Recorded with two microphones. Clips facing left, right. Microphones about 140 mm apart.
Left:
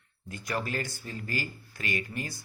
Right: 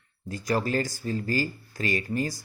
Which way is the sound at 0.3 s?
35° right (ahead or behind).